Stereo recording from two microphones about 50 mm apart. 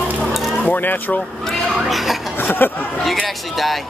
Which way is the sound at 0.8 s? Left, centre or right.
Left.